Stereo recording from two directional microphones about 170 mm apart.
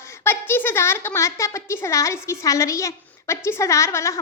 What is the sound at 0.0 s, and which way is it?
A woman's voice, 15° left (ahead or behind).